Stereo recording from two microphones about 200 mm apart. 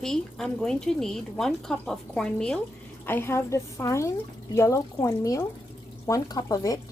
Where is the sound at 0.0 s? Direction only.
Centre (ahead or behind).